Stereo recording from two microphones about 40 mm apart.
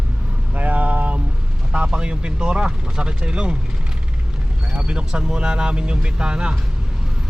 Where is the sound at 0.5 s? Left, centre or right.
Right.